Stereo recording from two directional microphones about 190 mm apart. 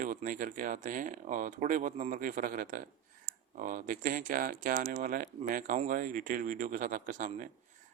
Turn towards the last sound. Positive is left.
turn(degrees=-40)  # may be behind; listen again after turning